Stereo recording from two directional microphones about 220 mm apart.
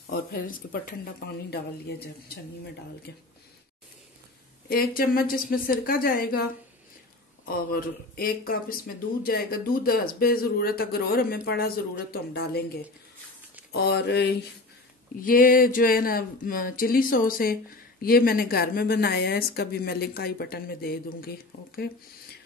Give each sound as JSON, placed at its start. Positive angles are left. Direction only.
{"t": 0.0, "sound": "a woman's voice", "side_deg": 40}
{"t": 4.6, "sound": "a woman's voice", "side_deg": 45}
{"t": 7.4, "sound": "speech", "side_deg": 40}
{"t": 13.8, "sound": "speech", "side_deg": 50}
{"t": 15.2, "sound": "speech", "side_deg": 40}